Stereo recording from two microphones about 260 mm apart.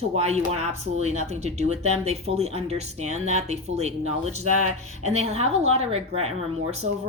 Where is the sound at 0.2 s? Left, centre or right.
Right.